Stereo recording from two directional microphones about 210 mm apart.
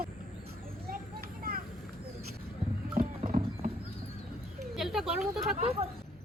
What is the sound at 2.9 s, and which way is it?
Clip-clop, 40° right (ahead or behind).